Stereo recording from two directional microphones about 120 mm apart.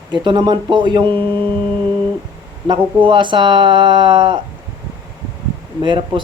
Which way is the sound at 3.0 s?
40° right (ahead or behind).